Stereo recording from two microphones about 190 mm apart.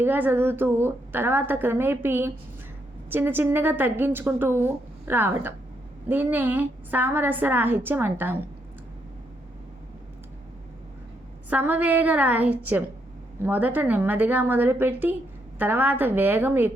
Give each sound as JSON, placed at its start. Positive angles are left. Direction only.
{"t": 0.0, "sound": "a woman's voice", "side_deg": -10}
{"t": 11.4, "sound": "a woman's voice", "side_deg": -10}